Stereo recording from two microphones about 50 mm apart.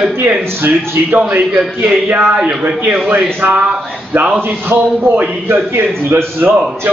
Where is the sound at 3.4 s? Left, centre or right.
Right.